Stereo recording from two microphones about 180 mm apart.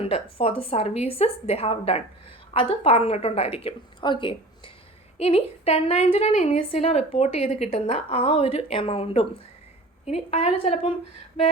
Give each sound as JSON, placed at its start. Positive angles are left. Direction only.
{"t": 0.0, "sound": "a woman's voice", "side_deg": 30}